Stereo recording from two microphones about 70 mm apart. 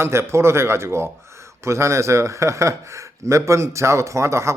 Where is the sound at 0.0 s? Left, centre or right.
Right.